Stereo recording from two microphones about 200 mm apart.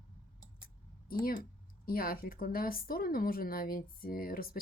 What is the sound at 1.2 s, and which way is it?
Speech, 45° left (ahead or behind).